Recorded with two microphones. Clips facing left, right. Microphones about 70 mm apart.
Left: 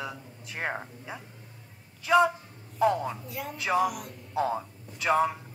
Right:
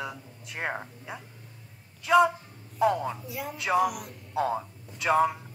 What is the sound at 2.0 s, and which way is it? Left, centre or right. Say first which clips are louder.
A woman's voice: right 1 dB; centre.